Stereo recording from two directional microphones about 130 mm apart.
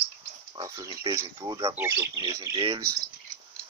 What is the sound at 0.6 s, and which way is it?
Speech, 30° right (ahead or behind).